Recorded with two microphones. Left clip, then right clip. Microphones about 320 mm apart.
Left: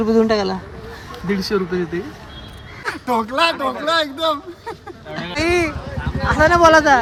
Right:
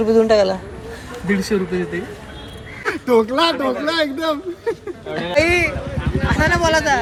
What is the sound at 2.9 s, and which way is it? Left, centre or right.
Speech, centre.